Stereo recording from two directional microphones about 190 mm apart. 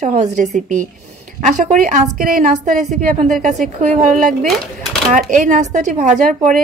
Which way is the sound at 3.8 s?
40° right (ahead or behind).